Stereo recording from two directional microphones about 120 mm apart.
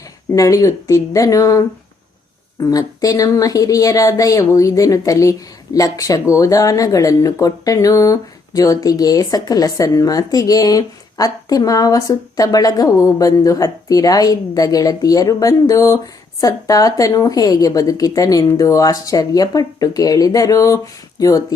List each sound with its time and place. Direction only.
0.3 s speech: 30° left (ahead or behind)